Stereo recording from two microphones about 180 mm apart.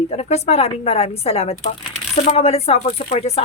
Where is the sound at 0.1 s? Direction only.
35° left (ahead or behind).